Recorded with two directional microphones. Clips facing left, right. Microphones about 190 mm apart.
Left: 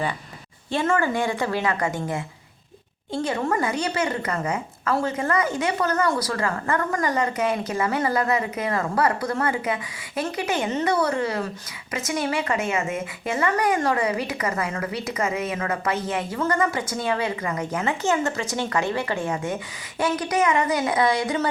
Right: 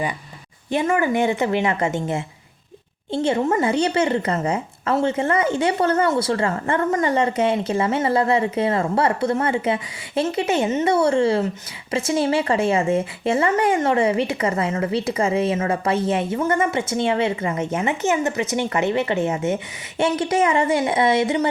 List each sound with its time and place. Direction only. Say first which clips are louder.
0.7 s speech: right 3 dB; 15° right (ahead or behind)